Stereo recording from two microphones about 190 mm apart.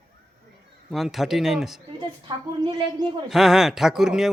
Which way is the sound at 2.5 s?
25° right (ahead or behind).